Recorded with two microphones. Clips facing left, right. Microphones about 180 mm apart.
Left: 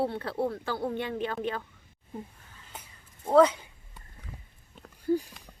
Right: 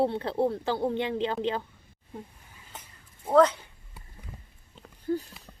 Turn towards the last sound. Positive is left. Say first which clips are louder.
# left 3 dB
turn(degrees=10)  # may be behind; listen again after turning